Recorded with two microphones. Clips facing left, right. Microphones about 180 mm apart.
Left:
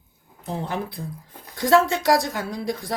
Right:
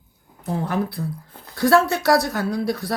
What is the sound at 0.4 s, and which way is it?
Speech, 20° left (ahead or behind).